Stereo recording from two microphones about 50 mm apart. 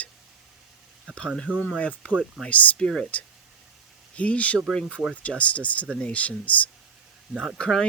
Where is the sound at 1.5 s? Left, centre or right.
Left.